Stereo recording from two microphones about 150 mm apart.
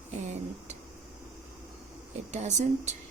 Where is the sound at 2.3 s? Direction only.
50° right (ahead or behind).